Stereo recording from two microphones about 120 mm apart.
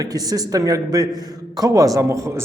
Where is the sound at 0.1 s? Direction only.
30° right (ahead or behind).